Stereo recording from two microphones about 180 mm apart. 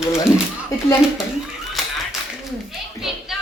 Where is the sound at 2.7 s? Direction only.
Centre (ahead or behind).